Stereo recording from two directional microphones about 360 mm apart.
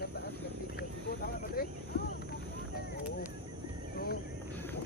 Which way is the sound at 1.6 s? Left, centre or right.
Left.